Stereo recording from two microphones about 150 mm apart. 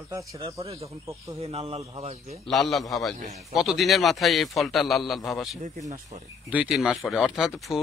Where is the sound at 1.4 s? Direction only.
40° right (ahead or behind).